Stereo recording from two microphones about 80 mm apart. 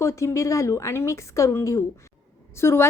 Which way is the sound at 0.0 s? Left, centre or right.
Left.